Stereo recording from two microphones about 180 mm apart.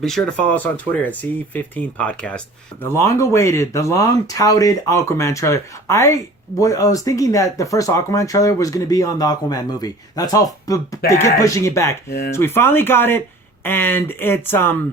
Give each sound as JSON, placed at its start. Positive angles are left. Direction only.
{"t": 0.0, "sound": "speech", "side_deg": 0}